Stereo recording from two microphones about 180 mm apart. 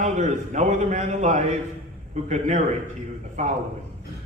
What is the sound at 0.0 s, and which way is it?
A man's voice, 40° right (ahead or behind).